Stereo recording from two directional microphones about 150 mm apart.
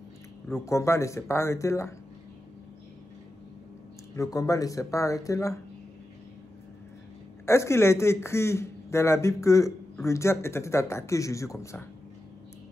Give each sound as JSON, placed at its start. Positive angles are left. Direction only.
{"t": 0.5, "sound": "speech", "side_deg": 20}
{"t": 4.1, "sound": "speech", "side_deg": 20}
{"t": 7.4, "sound": "a man's voice", "side_deg": 20}